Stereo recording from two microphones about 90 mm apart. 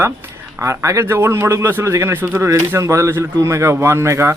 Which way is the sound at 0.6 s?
35° right (ahead or behind).